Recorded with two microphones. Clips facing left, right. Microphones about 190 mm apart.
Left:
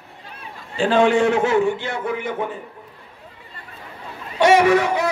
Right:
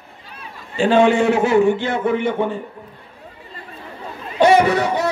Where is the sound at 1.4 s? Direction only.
20° right (ahead or behind).